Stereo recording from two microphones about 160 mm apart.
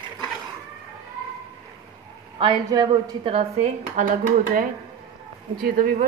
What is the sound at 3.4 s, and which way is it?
A woman's voice, 45° right (ahead or behind).